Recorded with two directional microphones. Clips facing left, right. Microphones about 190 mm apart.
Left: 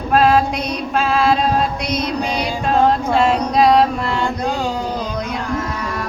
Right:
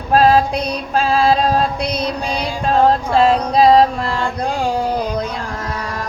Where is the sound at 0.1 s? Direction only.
35° right (ahead or behind).